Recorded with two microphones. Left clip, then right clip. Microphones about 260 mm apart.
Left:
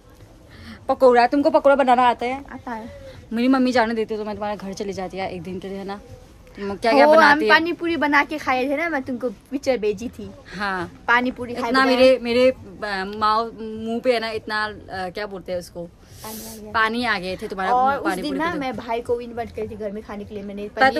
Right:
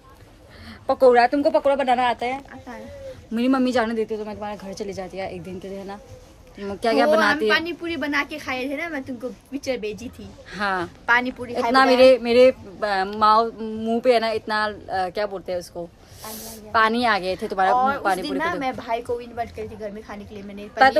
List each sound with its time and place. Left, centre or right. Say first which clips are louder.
0.8 s speech: even; centre
7.2 s a woman's voice: left 5 dB; centre
10.5 s speech: right 1 dB; centre
11.1 s speech: left 1 dB; centre
11.7 s speech: right 1 dB; centre
17.7 s speech: left 1 dB; centre